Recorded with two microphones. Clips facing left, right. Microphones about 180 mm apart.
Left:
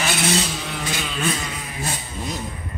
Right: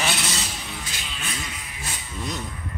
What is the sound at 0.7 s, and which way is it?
Vehicle, 75° left (ahead or behind).